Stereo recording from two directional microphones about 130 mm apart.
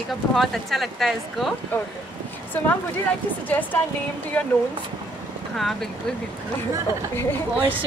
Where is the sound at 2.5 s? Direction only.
15° left (ahead or behind).